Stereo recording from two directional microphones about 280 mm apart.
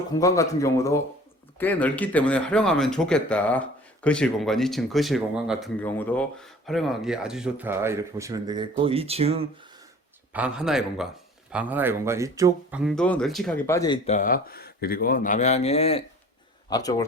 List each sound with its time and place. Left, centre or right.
0.1 s speech: centre; by 9.5 s right
10.3 s speech: centre
14.2 s speech: left; by 17.0 s centre